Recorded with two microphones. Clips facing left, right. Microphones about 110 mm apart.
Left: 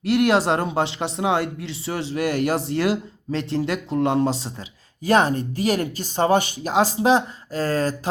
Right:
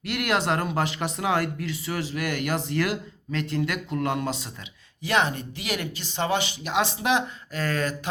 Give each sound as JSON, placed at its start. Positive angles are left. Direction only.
{"t": 0.0, "sound": "speech", "side_deg": 30}